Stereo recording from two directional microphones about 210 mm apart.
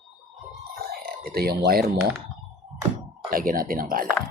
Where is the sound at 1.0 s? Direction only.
45° right (ahead or behind).